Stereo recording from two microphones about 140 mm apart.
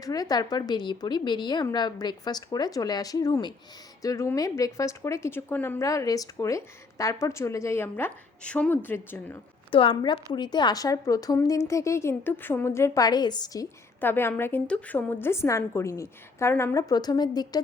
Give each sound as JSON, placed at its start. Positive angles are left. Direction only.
{"t": 0.0, "sound": "a woman's voice", "side_deg": 25}
{"t": 9.7, "sound": "a woman's voice", "side_deg": 40}
{"t": 14.0, "sound": "a woman's voice", "side_deg": 15}